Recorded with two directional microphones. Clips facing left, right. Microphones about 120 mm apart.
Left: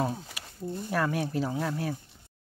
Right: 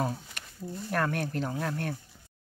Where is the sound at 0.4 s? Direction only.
5° left (ahead or behind).